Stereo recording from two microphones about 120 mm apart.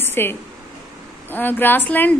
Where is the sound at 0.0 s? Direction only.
20° left (ahead or behind).